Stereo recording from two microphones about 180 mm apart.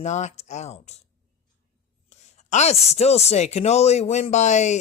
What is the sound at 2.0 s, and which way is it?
Speech, 40° left (ahead or behind).